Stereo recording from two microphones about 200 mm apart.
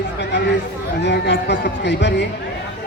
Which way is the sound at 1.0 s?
60° left (ahead or behind).